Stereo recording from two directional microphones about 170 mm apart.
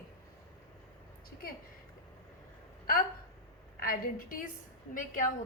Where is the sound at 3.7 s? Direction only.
60° left (ahead or behind).